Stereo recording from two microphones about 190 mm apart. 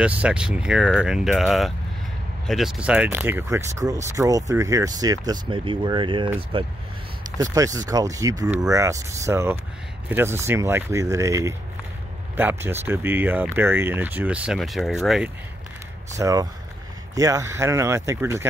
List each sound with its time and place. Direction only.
0.0 s speech: 5° right (ahead or behind); by 6.7 s 30° right (ahead or behind)
7.5 s speech: 15° right (ahead or behind); by 15.3 s centre (ahead or behind)
16.2 s speech: 20° right (ahead or behind)